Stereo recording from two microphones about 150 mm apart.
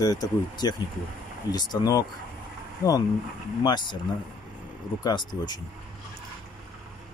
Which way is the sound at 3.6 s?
30° left (ahead or behind).